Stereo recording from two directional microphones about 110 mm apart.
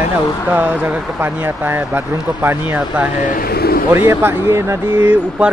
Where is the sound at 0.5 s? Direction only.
15° right (ahead or behind).